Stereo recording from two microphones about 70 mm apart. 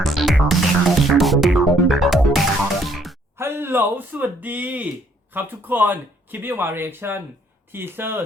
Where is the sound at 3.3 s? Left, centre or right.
Right.